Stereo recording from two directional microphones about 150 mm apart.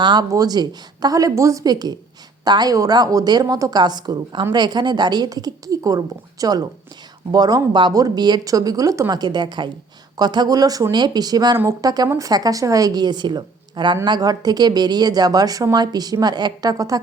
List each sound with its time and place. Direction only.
0.0 s speech: 30° right (ahead or behind)